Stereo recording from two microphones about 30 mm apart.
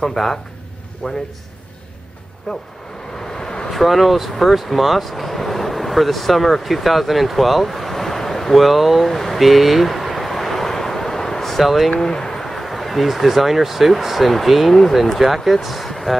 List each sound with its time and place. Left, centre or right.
0.0 s speech: centre
2.5 s speech: centre
3.3 s vehicle: centre
3.7 s speech: centre
11.5 s speech: centre
12.0 s speech: centre
14.7 s speech: centre
15.1 s speech: centre